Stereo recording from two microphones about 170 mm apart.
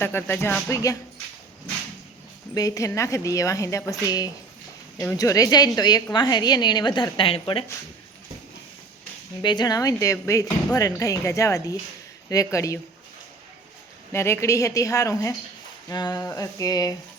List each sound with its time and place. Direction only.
0.0 s speech: 10° left (ahead or behind)
2.6 s a woman's voice: 20° left (ahead or behind)
9.4 s a woman's voice: 25° left (ahead or behind)
14.1 s a woman's voice: 15° left (ahead or behind)